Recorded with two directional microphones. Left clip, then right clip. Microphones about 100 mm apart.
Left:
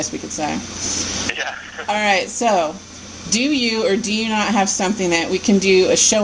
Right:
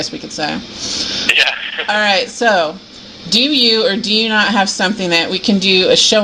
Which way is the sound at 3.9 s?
40° left (ahead or behind).